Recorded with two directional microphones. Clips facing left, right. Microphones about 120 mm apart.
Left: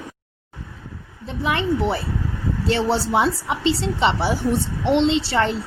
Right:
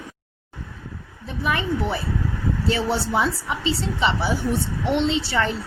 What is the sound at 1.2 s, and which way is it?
A woman's voice, 25° left (ahead or behind).